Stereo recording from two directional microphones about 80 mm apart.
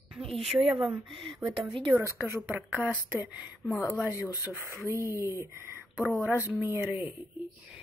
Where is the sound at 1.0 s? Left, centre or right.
Right.